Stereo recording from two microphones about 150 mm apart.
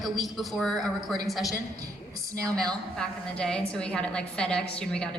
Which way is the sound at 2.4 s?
25° right (ahead or behind).